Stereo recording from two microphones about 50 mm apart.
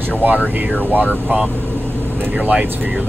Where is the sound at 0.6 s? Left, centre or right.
Right.